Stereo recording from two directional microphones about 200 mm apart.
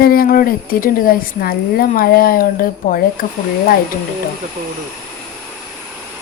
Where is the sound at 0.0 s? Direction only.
50° left (ahead or behind).